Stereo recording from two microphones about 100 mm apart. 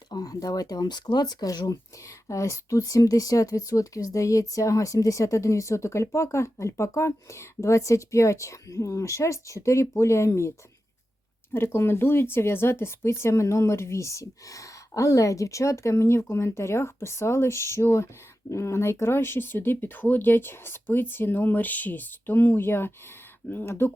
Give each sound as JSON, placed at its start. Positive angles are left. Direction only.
{"t": 0.1, "sound": "speech", "side_deg": 40}
{"t": 11.5, "sound": "speech", "side_deg": 25}